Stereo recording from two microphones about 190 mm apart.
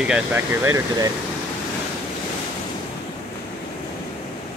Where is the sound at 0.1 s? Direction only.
10° right (ahead or behind).